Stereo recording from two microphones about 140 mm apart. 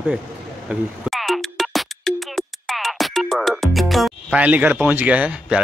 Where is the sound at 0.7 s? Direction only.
Centre (ahead or behind).